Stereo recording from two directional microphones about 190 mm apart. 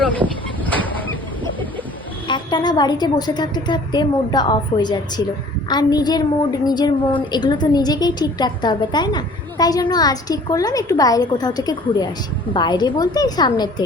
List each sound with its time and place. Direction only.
2.2 s a woman's voice: 25° left (ahead or behind)